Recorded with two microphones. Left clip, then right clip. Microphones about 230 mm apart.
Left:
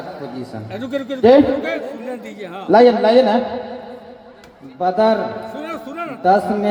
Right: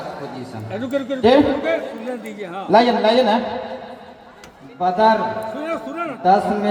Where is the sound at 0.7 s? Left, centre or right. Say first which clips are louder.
Right 2 dB; left.